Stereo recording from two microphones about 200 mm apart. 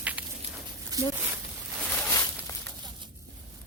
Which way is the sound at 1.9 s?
10° left (ahead or behind).